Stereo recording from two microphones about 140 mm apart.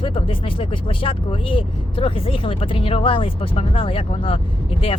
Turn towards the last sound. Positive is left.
turn(degrees=40)  # may be behind; listen again after turning